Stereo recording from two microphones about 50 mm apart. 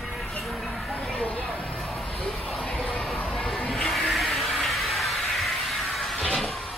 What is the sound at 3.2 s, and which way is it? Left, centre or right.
Crowd, centre.